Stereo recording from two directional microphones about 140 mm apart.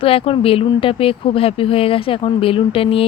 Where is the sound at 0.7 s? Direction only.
40° left (ahead or behind).